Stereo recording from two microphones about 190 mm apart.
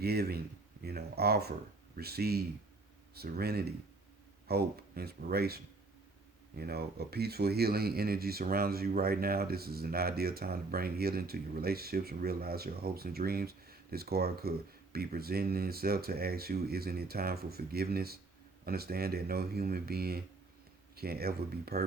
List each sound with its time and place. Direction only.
0.0 s speech: 55° right (ahead or behind)